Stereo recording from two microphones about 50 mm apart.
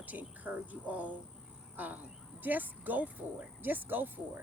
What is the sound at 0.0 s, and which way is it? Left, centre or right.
Speech, right.